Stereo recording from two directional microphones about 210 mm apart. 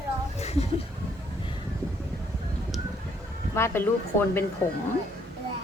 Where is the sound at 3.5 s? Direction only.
10° left (ahead or behind).